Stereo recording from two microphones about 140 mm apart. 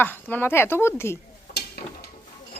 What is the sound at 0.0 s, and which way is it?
Speech, 15° left (ahead or behind).